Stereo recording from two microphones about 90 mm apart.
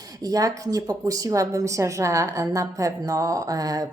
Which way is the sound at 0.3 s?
40° right (ahead or behind).